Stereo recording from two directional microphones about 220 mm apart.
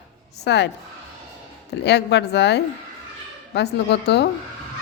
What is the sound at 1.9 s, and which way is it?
A man's voice, 50° left (ahead or behind).